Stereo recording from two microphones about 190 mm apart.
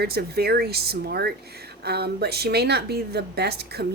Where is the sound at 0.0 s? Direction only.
55° right (ahead or behind).